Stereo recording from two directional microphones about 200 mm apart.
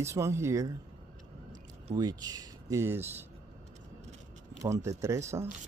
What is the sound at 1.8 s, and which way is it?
Speech, 20° right (ahead or behind).